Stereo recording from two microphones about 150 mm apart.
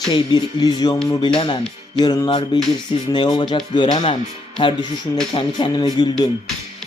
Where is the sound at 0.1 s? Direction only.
30° left (ahead or behind).